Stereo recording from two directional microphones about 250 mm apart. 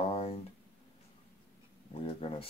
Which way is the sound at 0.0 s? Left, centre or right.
Left.